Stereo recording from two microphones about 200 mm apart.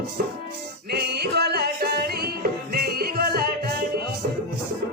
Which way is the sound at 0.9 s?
55° right (ahead or behind).